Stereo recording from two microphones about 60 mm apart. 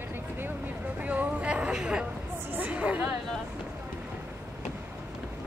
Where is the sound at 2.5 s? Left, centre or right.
Right.